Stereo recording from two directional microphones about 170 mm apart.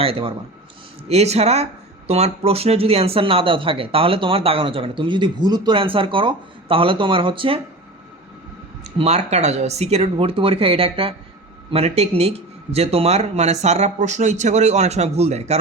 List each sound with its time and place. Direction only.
0.0 s speech: 35° right (ahead or behind)
8.8 s speech: 40° right (ahead or behind)